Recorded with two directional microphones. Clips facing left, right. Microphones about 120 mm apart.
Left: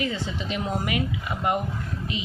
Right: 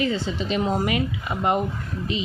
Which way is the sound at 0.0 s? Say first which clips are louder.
Right 4 dB; 30° right (ahead or behind).